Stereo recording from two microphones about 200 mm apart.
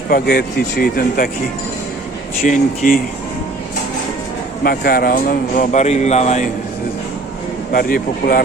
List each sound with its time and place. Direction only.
0.1 s speech: 45° left (ahead or behind)
2.4 s speech: 45° left (ahead or behind)
4.6 s a man's voice: 50° left (ahead or behind)
7.7 s speech: 45° left (ahead or behind)